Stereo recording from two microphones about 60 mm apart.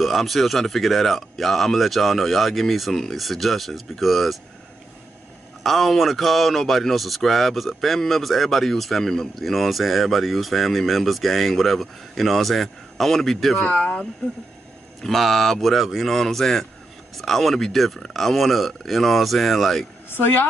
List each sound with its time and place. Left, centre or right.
0.0 s speech: centre
5.6 s speech: centre
13.7 s speech: left
15.0 s speech: centre
20.1 s speech: left